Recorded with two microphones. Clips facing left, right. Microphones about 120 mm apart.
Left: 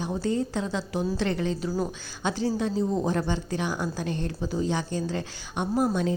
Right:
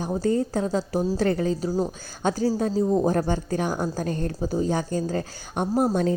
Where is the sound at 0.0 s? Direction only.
40° right (ahead or behind).